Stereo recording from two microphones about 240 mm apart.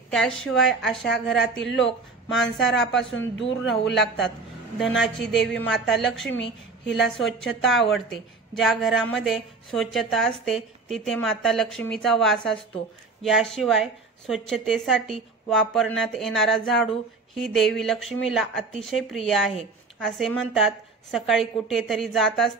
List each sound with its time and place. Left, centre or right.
0.1 s a woman's voice: centre
3.2 s speech: left
3.9 s a woman's voice: centre